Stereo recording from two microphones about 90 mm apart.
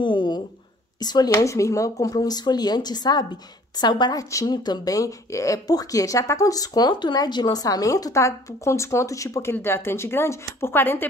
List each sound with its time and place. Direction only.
0.0 s a sound: 60° left (ahead or behind)
0.9 s speech: 50° left (ahead or behind)
1.3 s a woman's voice: 35° left (ahead or behind)